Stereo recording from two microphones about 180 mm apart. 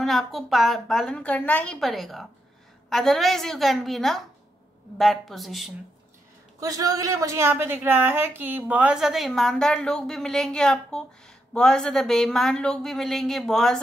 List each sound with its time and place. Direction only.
0.0 s a woman's voice: centre (ahead or behind)
6.6 s a woman's voice: 20° right (ahead or behind); by 13.7 s 5° left (ahead or behind)